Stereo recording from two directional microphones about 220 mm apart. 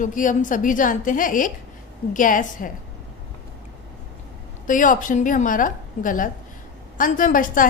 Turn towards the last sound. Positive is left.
turn(degrees=40)  # may be behind; listen again after turning